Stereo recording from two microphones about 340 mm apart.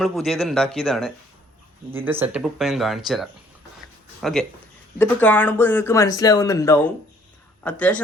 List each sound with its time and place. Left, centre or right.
0.0 s speech: centre